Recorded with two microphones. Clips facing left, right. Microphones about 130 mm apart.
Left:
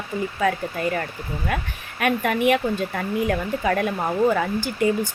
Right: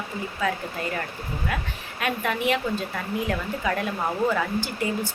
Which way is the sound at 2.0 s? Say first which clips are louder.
Left 5 dB; 55° left (ahead or behind).